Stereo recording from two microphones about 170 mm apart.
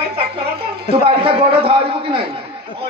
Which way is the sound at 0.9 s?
35° right (ahead or behind).